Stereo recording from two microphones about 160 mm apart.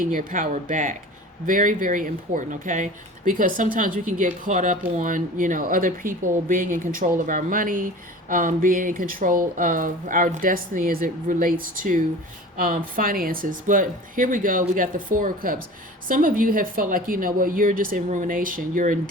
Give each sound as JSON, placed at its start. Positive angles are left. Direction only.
{"t": 0.0, "sound": "speech", "side_deg": -60}